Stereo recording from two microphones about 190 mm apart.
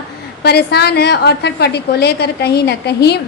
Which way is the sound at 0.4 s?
60° left (ahead or behind).